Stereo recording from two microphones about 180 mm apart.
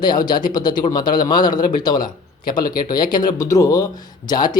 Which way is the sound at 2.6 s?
55° left (ahead or behind).